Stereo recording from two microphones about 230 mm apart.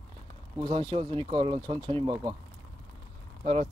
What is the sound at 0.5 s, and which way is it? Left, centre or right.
Speech, centre.